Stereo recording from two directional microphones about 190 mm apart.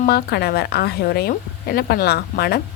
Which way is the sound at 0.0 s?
55° left (ahead or behind).